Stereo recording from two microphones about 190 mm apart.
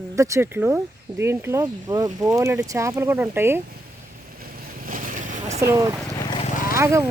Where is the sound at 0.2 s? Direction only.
15° right (ahead or behind).